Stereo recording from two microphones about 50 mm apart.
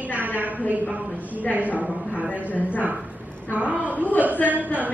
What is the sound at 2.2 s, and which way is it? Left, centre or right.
Speech, right.